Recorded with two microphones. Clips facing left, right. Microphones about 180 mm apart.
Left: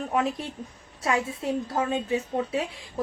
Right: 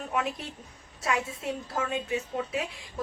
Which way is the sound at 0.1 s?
30° left (ahead or behind).